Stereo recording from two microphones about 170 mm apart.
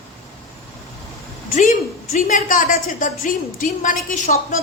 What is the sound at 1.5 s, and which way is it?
A woman's voice, 50° left (ahead or behind).